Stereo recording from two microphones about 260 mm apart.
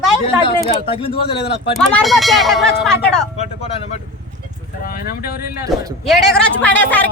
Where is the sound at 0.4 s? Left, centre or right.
Left.